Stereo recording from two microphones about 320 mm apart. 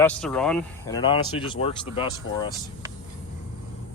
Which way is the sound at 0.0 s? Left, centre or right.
Centre.